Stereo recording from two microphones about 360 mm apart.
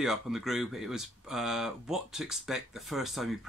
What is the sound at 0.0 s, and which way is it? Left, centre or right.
Speech, centre.